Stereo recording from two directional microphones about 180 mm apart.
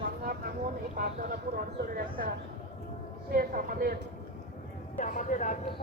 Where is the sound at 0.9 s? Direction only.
55° right (ahead or behind).